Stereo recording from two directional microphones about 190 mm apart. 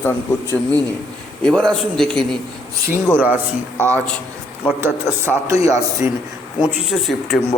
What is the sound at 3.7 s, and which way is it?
Speech, 10° left (ahead or behind).